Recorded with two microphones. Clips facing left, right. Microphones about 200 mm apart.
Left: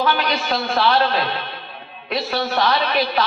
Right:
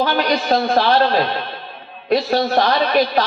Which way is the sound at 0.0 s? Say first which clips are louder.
Right 3 dB; 40° right (ahead or behind).